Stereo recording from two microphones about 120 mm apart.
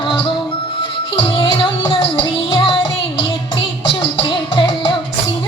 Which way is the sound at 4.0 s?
45° left (ahead or behind).